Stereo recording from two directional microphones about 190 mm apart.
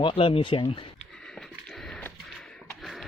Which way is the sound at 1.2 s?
Centre (ahead or behind).